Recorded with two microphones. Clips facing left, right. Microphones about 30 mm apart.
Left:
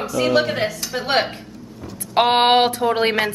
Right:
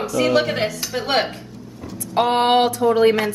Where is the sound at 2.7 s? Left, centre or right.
Left.